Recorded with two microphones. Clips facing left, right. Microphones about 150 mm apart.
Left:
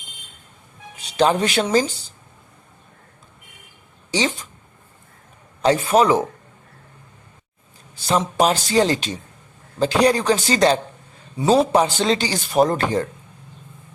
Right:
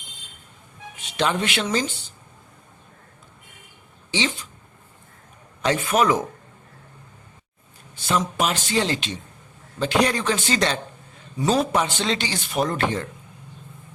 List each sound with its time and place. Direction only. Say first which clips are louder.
0.9 s speech: left 6 dB; 35° left (ahead or behind)
4.1 s speech: left 3 dB; 45° left (ahead or behind)
5.6 s speech: left 4 dB; 35° left (ahead or behind)
8.4 s speech: left 6 dB; 35° left (ahead or behind)